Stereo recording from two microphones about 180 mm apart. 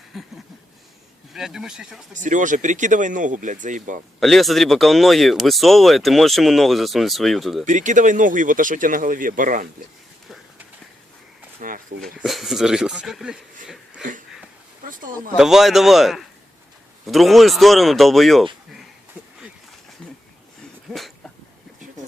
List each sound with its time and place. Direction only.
0.1 s speech: centre (ahead or behind)
2.1 s speech: 45° right (ahead or behind)
4.2 s speech: centre (ahead or behind)
7.6 s speech: 45° right (ahead or behind)
11.6 s a sound: 50° right (ahead or behind)
12.0 s speech: centre (ahead or behind)
15.4 s speech: centre (ahead or behind)
20.9 s dog: 5° left (ahead or behind)